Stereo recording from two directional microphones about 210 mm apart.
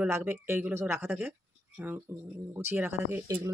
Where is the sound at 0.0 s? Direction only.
10° right (ahead or behind).